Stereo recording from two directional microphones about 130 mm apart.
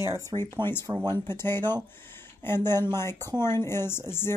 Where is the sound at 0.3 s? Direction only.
35° right (ahead or behind).